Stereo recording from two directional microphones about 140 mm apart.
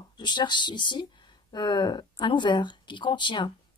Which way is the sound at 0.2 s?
30° left (ahead or behind).